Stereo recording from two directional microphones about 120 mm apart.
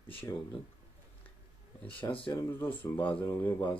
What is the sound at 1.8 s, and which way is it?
Speech, 10° left (ahead or behind).